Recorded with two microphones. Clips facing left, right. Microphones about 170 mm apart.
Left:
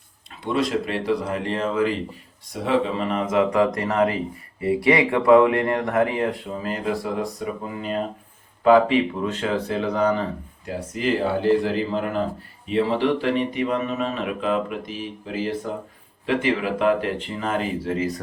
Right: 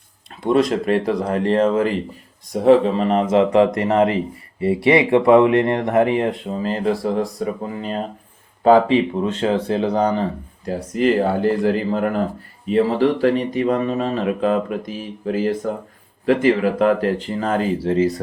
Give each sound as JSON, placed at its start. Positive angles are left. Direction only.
{"t": 0.5, "sound": "speech", "side_deg": -45}
{"t": 10.8, "sound": "speech", "side_deg": -40}